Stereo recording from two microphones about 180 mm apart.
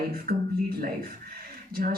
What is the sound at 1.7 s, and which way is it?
Speech, 55° right (ahead or behind).